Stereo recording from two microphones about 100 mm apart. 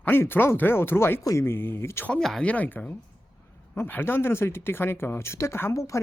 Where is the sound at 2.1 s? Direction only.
5° left (ahead or behind).